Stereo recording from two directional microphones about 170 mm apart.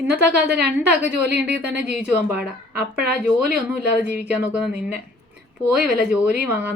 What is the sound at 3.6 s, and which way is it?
Speech, 5° right (ahead or behind).